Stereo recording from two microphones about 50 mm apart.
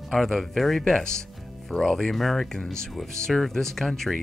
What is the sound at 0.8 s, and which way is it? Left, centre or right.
Speech, centre.